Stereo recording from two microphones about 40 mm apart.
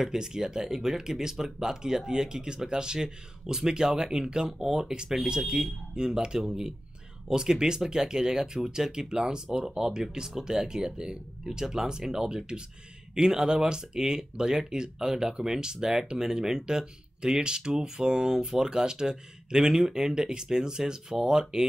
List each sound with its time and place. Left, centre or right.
0.0 s speech: centre